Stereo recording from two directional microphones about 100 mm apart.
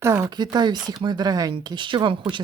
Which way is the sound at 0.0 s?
25° right (ahead or behind).